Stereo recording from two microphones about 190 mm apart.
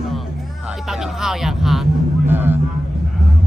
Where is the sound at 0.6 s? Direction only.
Centre (ahead or behind).